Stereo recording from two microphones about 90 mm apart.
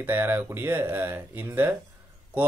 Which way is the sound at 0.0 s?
25° right (ahead or behind).